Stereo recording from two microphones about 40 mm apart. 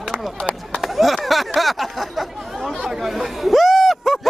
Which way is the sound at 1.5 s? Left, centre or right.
Centre.